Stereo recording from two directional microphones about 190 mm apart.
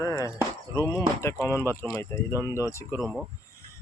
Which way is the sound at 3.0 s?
Centre (ahead or behind).